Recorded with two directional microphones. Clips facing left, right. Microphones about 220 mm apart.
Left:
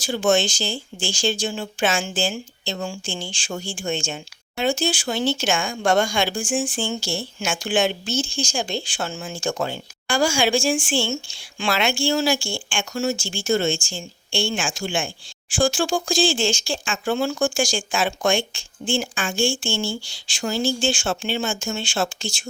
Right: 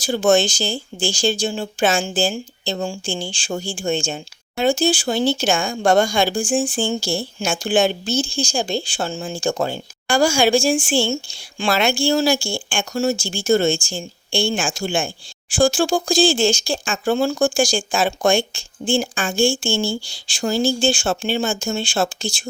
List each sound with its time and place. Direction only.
0.0 s speech: 40° right (ahead or behind)